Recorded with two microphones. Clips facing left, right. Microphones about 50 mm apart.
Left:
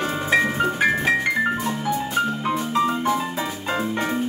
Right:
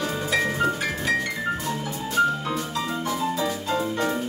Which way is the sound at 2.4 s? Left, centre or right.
Left.